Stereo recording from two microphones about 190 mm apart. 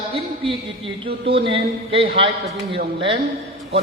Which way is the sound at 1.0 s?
30° right (ahead or behind).